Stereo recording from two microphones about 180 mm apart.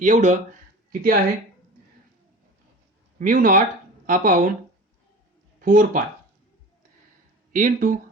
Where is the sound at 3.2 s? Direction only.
45° right (ahead or behind).